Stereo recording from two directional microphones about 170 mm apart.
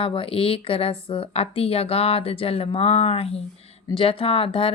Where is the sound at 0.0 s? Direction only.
30° left (ahead or behind).